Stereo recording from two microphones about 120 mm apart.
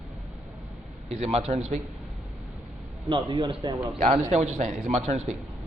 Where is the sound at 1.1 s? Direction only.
60° right (ahead or behind).